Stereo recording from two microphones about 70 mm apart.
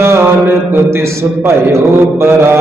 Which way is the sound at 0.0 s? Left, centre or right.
Right.